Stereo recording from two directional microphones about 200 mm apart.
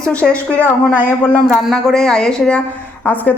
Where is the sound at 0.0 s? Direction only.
5° left (ahead or behind).